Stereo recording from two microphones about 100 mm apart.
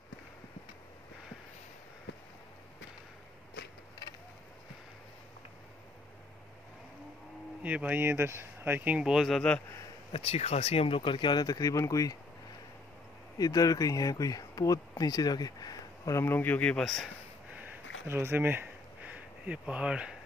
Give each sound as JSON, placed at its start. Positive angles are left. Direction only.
{"t": 7.6, "sound": "speech", "side_deg": -15}
{"t": 10.1, "sound": "speech", "side_deg": 80}
{"t": 13.4, "sound": "speech", "side_deg": 35}
{"t": 16.2, "sound": "speech", "side_deg": 20}
{"t": 18.0, "sound": "speech", "side_deg": -25}